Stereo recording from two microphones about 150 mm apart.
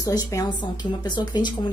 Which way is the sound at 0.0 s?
20° left (ahead or behind).